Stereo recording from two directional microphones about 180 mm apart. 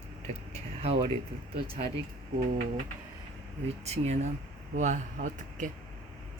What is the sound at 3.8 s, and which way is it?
Speech, 35° right (ahead or behind).